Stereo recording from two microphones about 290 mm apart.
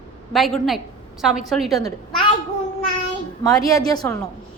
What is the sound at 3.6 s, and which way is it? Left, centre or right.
Speech, centre.